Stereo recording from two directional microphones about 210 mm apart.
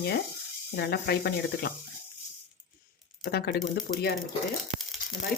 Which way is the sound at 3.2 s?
50° left (ahead or behind).